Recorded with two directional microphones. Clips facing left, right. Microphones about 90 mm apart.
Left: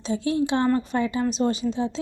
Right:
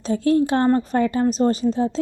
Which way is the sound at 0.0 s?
45° right (ahead or behind).